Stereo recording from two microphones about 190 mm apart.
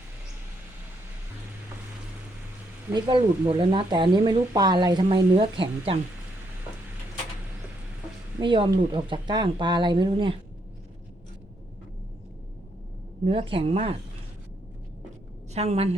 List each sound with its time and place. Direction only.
2.9 s speech: 25° right (ahead or behind)
8.4 s speech: 25° right (ahead or behind)
13.2 s speech: 30° right (ahead or behind)
15.5 s a woman's voice: 35° right (ahead or behind)